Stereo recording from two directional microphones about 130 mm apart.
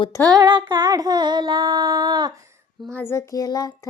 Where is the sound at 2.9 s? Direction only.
20° left (ahead or behind).